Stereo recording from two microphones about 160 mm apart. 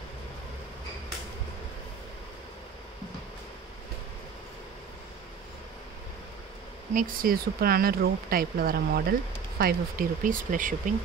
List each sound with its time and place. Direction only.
6.9 s speech: 60° right (ahead or behind)